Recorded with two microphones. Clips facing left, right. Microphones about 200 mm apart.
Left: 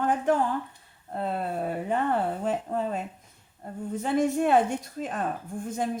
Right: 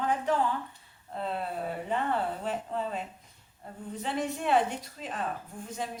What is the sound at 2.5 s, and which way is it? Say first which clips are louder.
A woman's voice: left 5 dB; 45° left (ahead or behind).